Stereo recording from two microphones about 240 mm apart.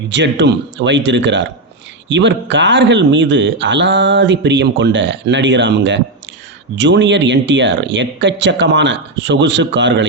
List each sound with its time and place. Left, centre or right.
0.1 s speech: right